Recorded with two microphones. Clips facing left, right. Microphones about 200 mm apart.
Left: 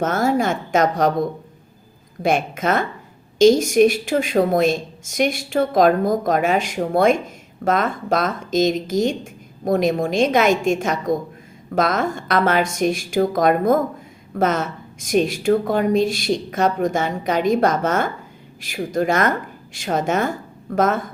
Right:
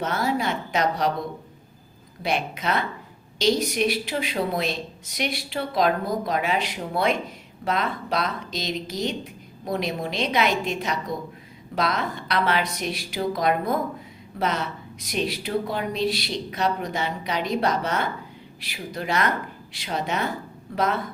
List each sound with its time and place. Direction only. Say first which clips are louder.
0.0 s a woman's voice: left 6 dB; 45° left (ahead or behind)